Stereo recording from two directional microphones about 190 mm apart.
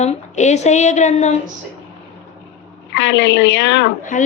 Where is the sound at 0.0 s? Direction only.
35° left (ahead or behind).